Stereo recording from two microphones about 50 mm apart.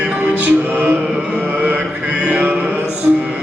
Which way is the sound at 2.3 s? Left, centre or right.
Right.